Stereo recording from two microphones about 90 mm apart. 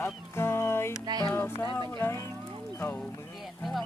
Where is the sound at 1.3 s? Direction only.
25° left (ahead or behind).